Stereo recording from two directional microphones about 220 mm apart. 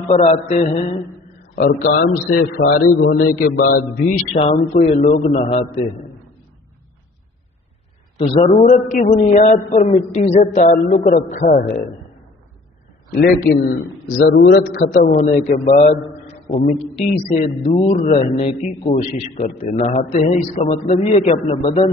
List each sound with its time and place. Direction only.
0.1 s a man's voice: 30° left (ahead or behind)
1.5 s a man's voice: 45° left (ahead or behind)
4.3 s a man's voice: 30° left (ahead or behind)
8.2 s a man's voice: 30° left (ahead or behind)
13.2 s a man's voice: 45° left (ahead or behind)
14.6 s a man's voice: 65° left (ahead or behind)
14.9 s a man's voice: 35° left (ahead or behind)